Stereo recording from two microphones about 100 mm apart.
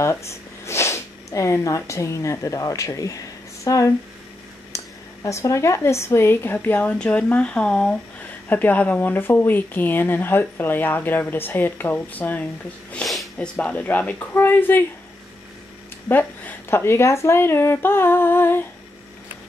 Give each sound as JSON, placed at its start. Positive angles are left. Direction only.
{"t": 0.0, "sound": "speech", "side_deg": 30}
{"t": 12.9, "sound": "a sound", "side_deg": 0}
{"t": 13.6, "sound": "speech", "side_deg": 15}
{"t": 16.1, "sound": "speech", "side_deg": 20}